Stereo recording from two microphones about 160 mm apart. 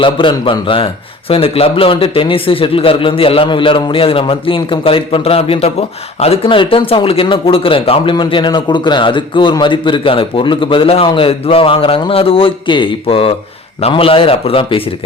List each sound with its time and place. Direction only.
0.0 s speech: 30° left (ahead or behind)